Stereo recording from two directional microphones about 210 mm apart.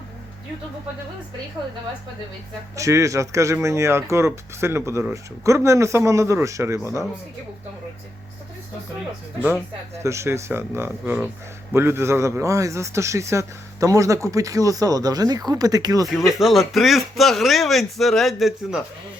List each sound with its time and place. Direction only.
2.7 s speech: 15° right (ahead or behind)
10.0 s speech: 15° right (ahead or behind)
16.1 s speech: centre (ahead or behind)